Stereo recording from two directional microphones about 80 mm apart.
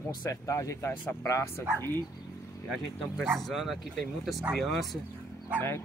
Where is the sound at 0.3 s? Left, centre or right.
Left.